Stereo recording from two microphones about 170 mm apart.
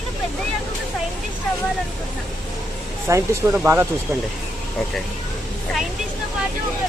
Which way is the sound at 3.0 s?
15° right (ahead or behind).